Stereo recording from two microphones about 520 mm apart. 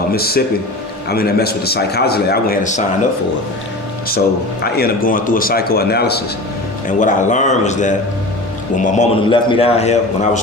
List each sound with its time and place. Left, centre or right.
0.1 s a man's voice: centre
4.6 s a man's voice: centre